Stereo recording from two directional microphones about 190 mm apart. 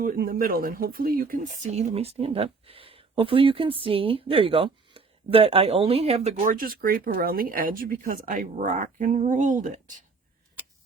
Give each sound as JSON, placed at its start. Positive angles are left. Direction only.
{"t": 0.0, "sound": "speech", "side_deg": -50}